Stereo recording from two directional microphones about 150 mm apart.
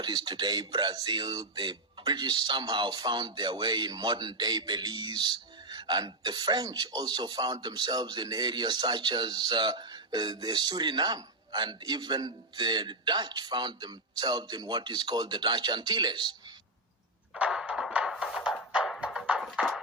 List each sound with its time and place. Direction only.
0.0 s speech: 30° right (ahead or behind)
17.3 s music: 5° right (ahead or behind)